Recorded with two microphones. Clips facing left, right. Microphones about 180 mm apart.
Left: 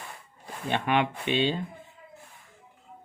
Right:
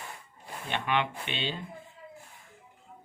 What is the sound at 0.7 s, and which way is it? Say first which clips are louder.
Speech: left 4 dB; 45° left (ahead or behind).